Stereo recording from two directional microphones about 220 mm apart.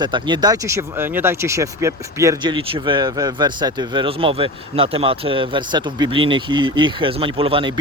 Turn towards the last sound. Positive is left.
turn(degrees=-25)  # may be behind; listen again after turning